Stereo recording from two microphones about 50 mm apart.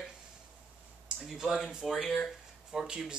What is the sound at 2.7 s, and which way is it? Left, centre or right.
Speech, centre.